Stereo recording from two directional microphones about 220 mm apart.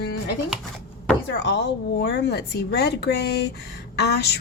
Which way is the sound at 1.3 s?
50° left (ahead or behind).